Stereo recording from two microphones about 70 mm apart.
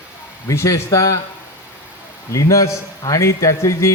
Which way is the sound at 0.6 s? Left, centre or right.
Left.